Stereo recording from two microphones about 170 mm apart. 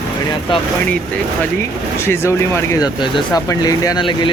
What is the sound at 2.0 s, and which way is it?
Speech, 15° left (ahead or behind).